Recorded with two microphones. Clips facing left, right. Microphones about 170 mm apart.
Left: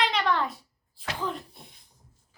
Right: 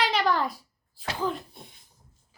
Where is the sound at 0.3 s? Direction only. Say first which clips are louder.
Right 1 dB; 40° right (ahead or behind).